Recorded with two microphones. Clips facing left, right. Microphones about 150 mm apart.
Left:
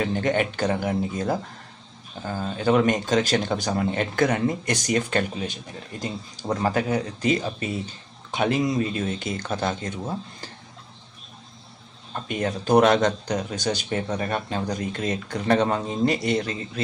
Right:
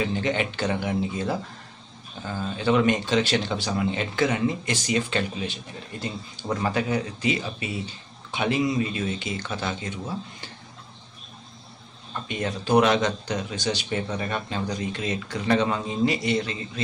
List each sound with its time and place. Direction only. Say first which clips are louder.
0.0 s speech: left 2 dB; 50° left (ahead or behind)
12.1 s speech: left 3 dB; 45° left (ahead or behind)